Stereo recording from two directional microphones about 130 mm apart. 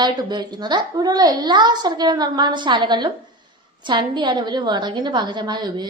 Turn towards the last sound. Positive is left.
turn(degrees=-35)  # may be behind; listen again after turning